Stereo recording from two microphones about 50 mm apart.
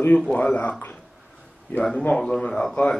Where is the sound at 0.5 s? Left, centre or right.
Left.